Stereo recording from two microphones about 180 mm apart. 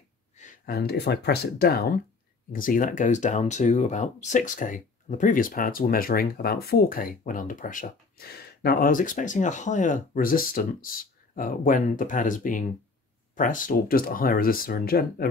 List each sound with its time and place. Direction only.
0.4 s speech: 50° left (ahead or behind)